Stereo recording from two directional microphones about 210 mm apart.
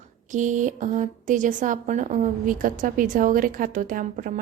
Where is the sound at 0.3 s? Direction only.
35° right (ahead or behind).